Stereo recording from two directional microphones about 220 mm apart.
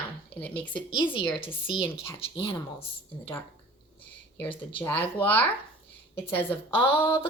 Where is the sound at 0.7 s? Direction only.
20° left (ahead or behind).